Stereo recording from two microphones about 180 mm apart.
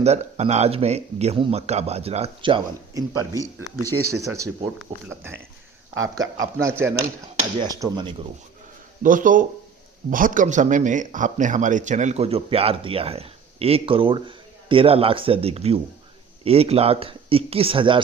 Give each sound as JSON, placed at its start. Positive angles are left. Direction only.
{"t": 0.0, "sound": "speech", "side_deg": -35}
{"t": 4.1, "sound": "speech", "side_deg": -15}
{"t": 9.0, "sound": "speech", "side_deg": -45}